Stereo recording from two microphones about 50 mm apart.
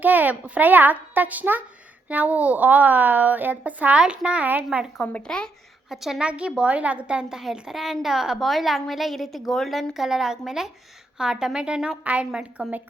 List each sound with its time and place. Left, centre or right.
0.0 s a woman's voice: right
4.0 s a woman's voice: right
5.2 s speech: centre
5.9 s a woman's voice: centre
6.1 s a woman's voice: right